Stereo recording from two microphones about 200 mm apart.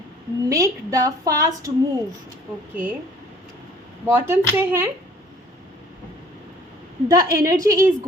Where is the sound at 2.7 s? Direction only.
10° right (ahead or behind).